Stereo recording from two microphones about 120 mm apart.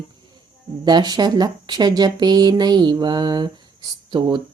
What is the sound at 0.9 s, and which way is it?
Speech, 35° right (ahead or behind).